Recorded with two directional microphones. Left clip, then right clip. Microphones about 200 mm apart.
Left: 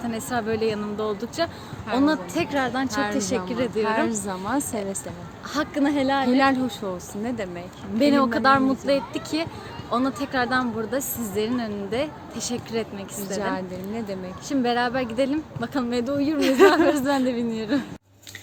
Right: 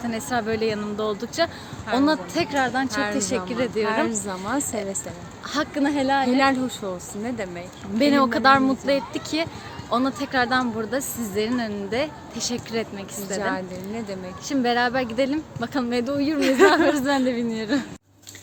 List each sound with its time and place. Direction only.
0.1 s a woman's voice: 15° right (ahead or behind)
2.9 s speech: 10° left (ahead or behind)
3.2 s a woman's voice: 10° right (ahead or behind)
4.0 s speech: 10° left (ahead or behind)
5.5 s a woman's voice: 15° right (ahead or behind)
6.2 s speech: 10° left (ahead or behind)
7.9 s a woman's voice: 20° right (ahead or behind)
13.4 s speech: 5° left (ahead or behind)
14.4 s a woman's voice: 15° right (ahead or behind)
16.4 s speech: 5° left (ahead or behind)
16.7 s a woman's voice: 15° right (ahead or behind)